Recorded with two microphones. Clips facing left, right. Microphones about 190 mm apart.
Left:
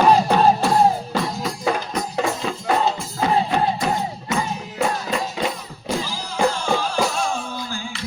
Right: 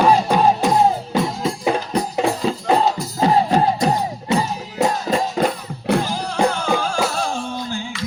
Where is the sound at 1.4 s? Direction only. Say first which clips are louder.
Right 3 dB; 30° right (ahead or behind); by 6.7 s 60° right (ahead or behind).